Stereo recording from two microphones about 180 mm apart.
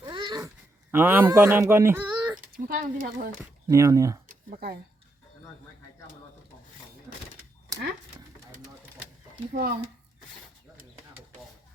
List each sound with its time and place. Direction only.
0.0 s babbling: 25° right (ahead or behind)
0.9 s speech: 10° right (ahead or behind)
2.5 s speech: 50° right (ahead or behind)
3.7 s speech: 15° right (ahead or behind)
4.3 s a sound: 55° right (ahead or behind)
9.5 s speech: 55° right (ahead or behind)